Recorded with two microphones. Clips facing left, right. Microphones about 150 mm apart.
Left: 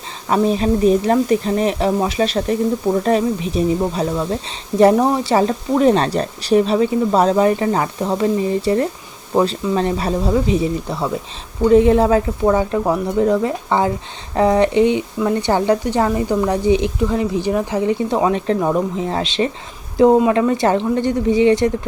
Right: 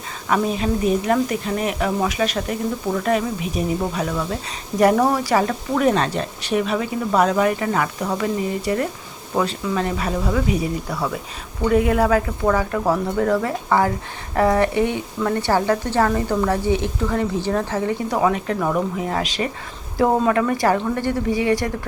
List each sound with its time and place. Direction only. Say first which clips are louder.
0.3 s speech: left 5 dB; 30° left (ahead or behind)